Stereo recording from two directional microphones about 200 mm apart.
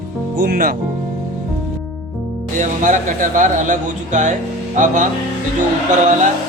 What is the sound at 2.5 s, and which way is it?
Speech, 40° right (ahead or behind).